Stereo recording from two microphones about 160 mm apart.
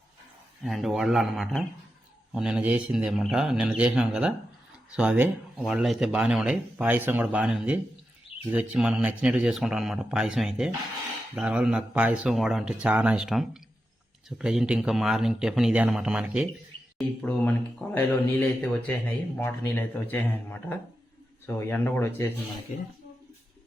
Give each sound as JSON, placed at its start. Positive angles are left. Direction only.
{"t": 0.6, "sound": "speech", "side_deg": 0}
{"t": 17.2, "sound": "a man's voice", "side_deg": 10}
{"t": 22.7, "sound": "speech", "side_deg": 50}